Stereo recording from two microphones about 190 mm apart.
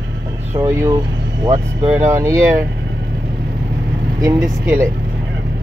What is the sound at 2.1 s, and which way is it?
Speech, 15° right (ahead or behind).